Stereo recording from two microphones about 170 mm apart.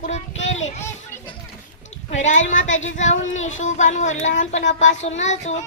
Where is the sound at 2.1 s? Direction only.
45° left (ahead or behind).